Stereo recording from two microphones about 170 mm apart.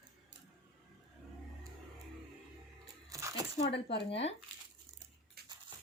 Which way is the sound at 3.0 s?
20° right (ahead or behind).